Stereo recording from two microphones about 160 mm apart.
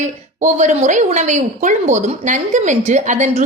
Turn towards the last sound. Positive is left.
turn(degrees=-50)  # may be behind; listen again after turning